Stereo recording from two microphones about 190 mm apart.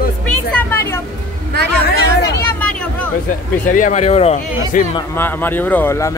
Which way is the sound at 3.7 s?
40° left (ahead or behind).